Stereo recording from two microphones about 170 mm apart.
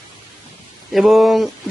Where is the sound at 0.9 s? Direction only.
Centre (ahead or behind).